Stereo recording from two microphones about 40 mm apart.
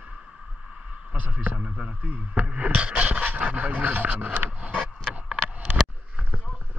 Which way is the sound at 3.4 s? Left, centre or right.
Right.